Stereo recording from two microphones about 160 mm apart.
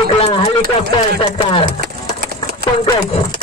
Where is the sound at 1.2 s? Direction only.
35° left (ahead or behind).